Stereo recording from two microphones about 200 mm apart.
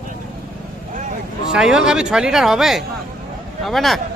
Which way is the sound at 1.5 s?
5° right (ahead or behind).